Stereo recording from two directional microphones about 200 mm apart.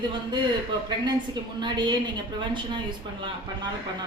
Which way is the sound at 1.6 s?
20° right (ahead or behind).